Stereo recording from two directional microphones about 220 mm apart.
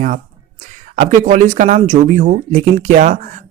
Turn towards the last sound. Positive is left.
turn(degrees=-35)  # may be behind; listen again after turning